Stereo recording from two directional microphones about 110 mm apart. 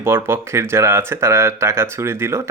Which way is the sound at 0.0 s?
25° right (ahead or behind).